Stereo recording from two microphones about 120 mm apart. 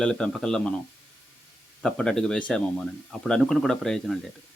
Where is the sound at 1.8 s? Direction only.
5° left (ahead or behind).